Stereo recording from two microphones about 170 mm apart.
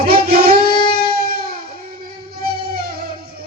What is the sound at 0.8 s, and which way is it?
Music, 65° right (ahead or behind).